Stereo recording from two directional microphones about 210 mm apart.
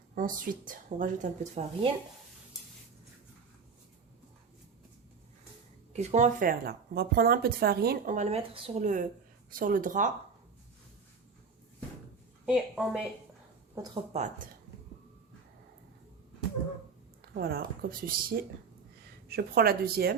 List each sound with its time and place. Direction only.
0.1 s speech: 40° right (ahead or behind)
5.9 s speech: 35° right (ahead or behind)
12.5 s a woman's voice: centre (ahead or behind)
13.7 s speech: 15° right (ahead or behind)
14.1 s speech: 35° right (ahead or behind)
17.3 s speech: 50° right (ahead or behind)